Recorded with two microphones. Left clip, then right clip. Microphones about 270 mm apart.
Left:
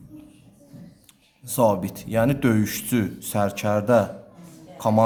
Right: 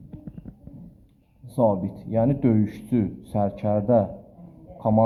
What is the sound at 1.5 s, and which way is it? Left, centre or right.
A man's voice, left.